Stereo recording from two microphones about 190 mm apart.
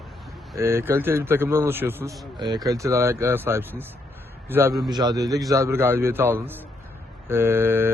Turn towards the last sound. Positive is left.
turn(degrees=-10)  # may be behind; listen again after turning